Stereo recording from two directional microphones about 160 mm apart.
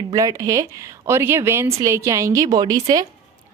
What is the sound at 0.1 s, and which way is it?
A woman's voice, 20° right (ahead or behind).